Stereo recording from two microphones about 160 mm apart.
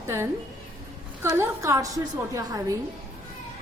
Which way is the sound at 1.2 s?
20° right (ahead or behind).